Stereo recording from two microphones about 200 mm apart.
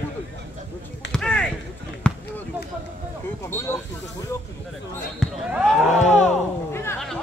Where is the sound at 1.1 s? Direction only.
5° left (ahead or behind).